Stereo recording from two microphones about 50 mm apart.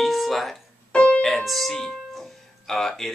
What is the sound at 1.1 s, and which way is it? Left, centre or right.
Music, centre.